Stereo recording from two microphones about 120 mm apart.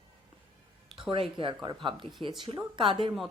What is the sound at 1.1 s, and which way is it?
Speech, 45° right (ahead or behind).